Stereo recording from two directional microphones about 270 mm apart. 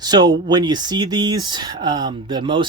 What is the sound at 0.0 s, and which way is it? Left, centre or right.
Speech, centre.